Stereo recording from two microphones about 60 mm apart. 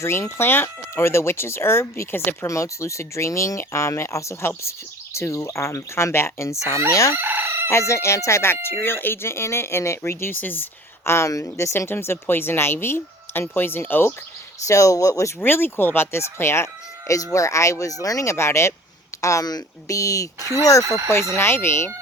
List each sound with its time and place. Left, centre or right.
0.0 s speech: left
2.5 s speech: left
7.1 s chicken: right
7.7 s speech: left
11.9 s speech: left
14.7 s speech: left
15.4 s speech: left
17.3 s speech: left
18.3 s speech: left
19.2 s speech: left
21.1 s speech: left